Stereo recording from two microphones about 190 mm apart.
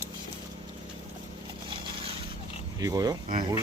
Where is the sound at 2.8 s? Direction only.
20° right (ahead or behind).